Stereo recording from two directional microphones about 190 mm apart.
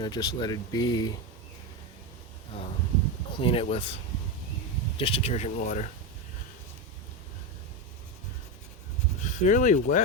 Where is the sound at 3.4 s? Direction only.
30° left (ahead or behind).